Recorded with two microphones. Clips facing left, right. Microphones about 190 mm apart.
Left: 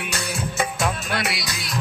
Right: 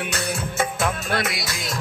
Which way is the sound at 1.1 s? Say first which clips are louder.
Right 1 dB; 50° right (ahead or behind).